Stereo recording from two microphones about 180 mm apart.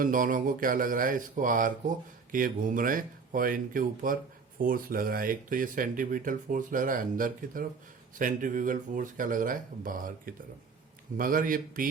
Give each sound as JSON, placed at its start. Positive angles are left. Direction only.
{"t": 0.0, "sound": "speech", "side_deg": -50}